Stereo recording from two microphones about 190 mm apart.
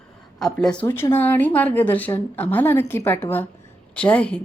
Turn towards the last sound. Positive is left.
turn(degrees=5)  # may be behind; listen again after turning